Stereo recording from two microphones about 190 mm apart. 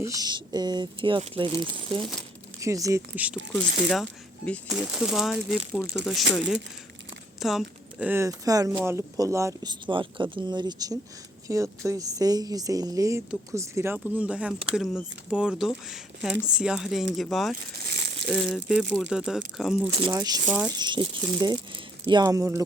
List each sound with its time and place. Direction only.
0.0 s speech: 20° right (ahead or behind); by 6.2 s centre (ahead or behind)
7.3 s speech: centre (ahead or behind)
17.7 s crumpling: 55° right (ahead or behind)
18.3 s speech: centre (ahead or behind)
19.9 s speech: 25° right (ahead or behind)
20.4 s speech: 5° right (ahead or behind)
20.7 s speech: 20° right (ahead or behind)